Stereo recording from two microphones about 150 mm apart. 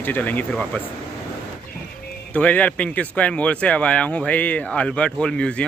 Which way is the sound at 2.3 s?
10° left (ahead or behind).